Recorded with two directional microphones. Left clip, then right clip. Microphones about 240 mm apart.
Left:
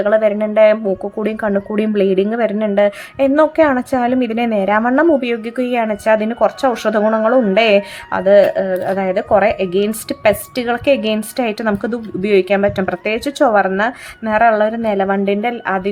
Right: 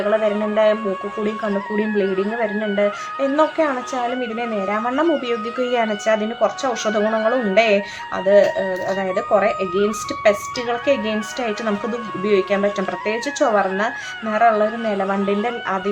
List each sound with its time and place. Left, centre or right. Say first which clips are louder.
0.1 s speech: left 5 dB; centre